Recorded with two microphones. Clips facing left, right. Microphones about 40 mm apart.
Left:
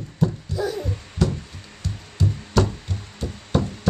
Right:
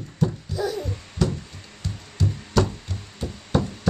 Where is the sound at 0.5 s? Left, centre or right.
Centre.